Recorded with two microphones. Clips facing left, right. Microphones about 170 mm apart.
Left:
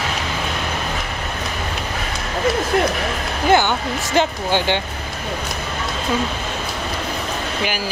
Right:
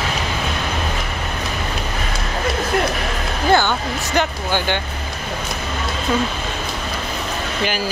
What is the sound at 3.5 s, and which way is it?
Speech, 20° left (ahead or behind).